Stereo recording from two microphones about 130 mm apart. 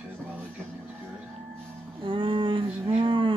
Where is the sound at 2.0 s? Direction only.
40° right (ahead or behind).